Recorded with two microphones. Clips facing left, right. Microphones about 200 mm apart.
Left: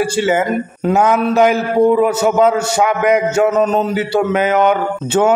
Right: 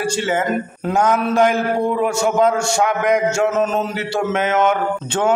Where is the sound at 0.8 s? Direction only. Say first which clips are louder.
Left 4 dB; centre (ahead or behind).